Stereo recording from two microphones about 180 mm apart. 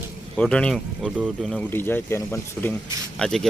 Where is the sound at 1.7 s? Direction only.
10° left (ahead or behind).